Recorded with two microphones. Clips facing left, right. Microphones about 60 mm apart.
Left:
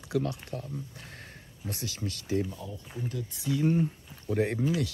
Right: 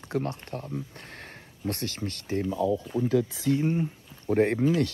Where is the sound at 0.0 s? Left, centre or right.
Right.